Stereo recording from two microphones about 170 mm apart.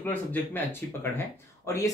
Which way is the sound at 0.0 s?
10° left (ahead or behind).